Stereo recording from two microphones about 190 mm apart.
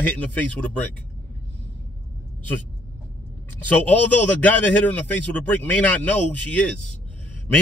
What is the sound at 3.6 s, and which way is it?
A man's voice, 10° left (ahead or behind).